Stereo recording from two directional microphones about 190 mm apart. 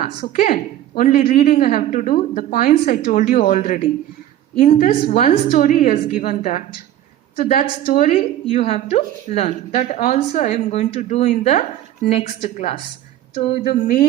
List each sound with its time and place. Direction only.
0.2 s a woman's voice: 50° left (ahead or behind); by 13.6 s 30° left (ahead or behind)
13.7 s a woman's voice: 50° left (ahead or behind)